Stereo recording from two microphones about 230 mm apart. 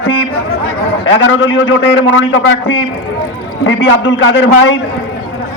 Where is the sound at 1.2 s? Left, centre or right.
Left.